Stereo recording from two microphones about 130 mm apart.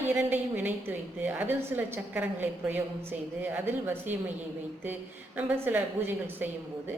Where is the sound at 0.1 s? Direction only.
15° right (ahead or behind).